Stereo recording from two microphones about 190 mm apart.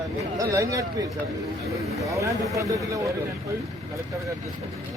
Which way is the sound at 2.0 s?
15° right (ahead or behind).